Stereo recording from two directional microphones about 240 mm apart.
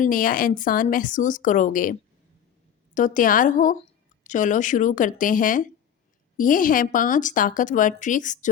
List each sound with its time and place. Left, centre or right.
0.0 s speech: left